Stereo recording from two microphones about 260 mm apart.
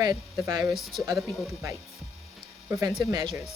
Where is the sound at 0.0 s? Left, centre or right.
Centre.